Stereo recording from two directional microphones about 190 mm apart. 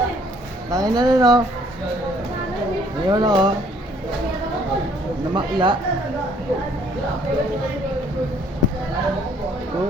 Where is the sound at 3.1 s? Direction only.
20° right (ahead or behind).